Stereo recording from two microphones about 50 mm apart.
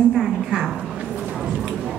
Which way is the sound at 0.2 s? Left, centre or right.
Centre.